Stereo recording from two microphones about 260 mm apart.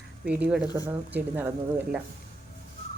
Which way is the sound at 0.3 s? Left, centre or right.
Centre.